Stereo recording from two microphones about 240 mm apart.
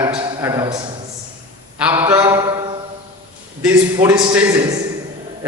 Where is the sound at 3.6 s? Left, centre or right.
Centre.